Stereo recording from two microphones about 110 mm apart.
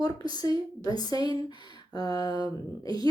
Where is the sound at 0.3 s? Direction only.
35° left (ahead or behind).